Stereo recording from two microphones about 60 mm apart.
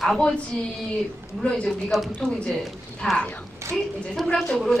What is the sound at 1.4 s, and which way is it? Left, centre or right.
Speech, centre.